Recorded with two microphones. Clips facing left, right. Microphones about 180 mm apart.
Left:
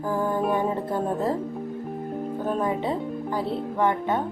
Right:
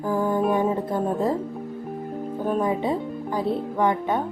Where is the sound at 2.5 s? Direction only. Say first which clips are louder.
Right 3 dB; 15° right (ahead or behind).